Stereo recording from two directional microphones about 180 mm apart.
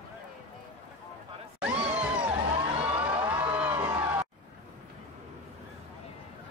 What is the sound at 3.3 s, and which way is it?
Crowd, 10° right (ahead or behind).